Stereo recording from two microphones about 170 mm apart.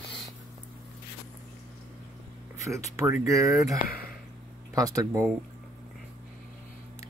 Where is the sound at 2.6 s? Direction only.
15° right (ahead or behind).